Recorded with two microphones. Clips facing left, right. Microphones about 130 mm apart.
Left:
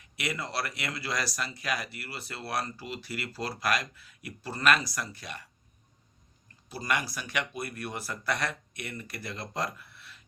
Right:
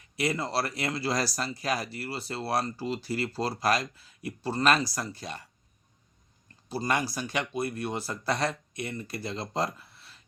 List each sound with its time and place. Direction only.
0.2 s speech: 30° right (ahead or behind)
6.7 s speech: 30° right (ahead or behind)